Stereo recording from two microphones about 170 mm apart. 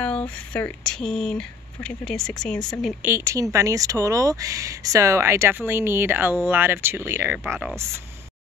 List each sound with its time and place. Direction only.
0.0 s speech: 5° left (ahead or behind)
3.0 s speech: 15° right (ahead or behind)